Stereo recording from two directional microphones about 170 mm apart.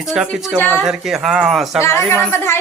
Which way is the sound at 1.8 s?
15° left (ahead or behind).